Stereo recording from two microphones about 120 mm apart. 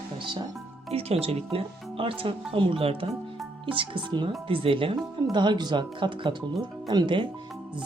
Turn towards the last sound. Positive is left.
turn(degrees=-40)  # may be behind; listen again after turning